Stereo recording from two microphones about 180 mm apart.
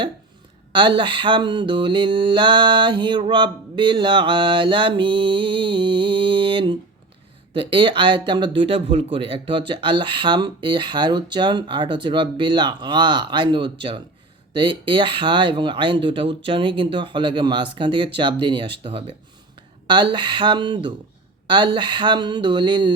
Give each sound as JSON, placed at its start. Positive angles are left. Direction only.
{"t": 0.7, "sound": "speech", "side_deg": -25}